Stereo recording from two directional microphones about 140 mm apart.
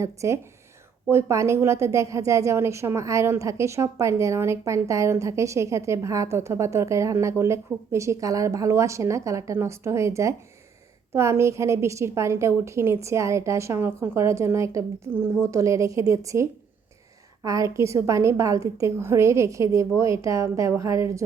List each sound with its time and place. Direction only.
0.0 s a woman's voice: 20° right (ahead or behind)